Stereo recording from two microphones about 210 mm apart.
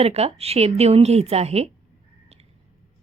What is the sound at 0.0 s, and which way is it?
Speech, 30° right (ahead or behind).